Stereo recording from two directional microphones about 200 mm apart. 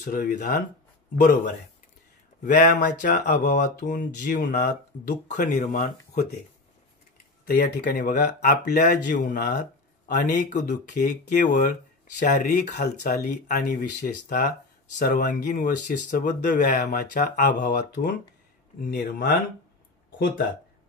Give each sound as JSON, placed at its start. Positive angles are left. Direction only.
{"t": 0.0, "sound": "speech", "side_deg": 40}
{"t": 2.4, "sound": "speech", "side_deg": 40}
{"t": 4.3, "sound": "speech", "side_deg": 55}
{"t": 5.3, "sound": "speech", "side_deg": 35}
{"t": 7.4, "sound": "speech", "side_deg": 45}